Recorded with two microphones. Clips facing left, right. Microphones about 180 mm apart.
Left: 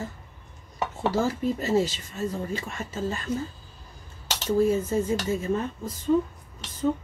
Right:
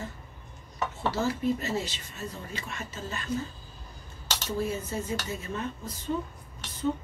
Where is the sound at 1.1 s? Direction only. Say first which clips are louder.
Left 1 dB; 45° left (ahead or behind).